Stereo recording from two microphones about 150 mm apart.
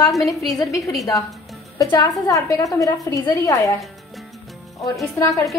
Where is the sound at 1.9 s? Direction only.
20° left (ahead or behind).